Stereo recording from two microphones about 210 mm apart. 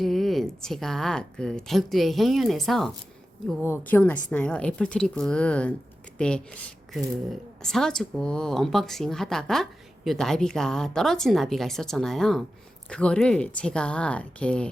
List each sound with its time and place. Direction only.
0.0 s a woman's voice: centre (ahead or behind)